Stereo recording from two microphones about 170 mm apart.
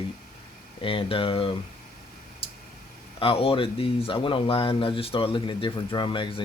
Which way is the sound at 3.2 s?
30° left (ahead or behind).